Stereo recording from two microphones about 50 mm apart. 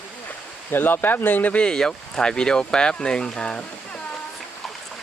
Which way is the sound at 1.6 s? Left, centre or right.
Centre.